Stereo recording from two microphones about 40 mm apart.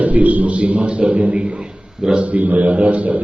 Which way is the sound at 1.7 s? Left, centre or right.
Centre.